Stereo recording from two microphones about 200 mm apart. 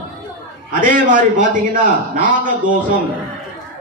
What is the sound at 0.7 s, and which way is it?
A man's voice, 40° right (ahead or behind).